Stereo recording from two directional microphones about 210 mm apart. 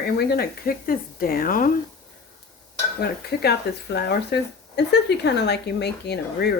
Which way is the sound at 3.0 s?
50° left (ahead or behind).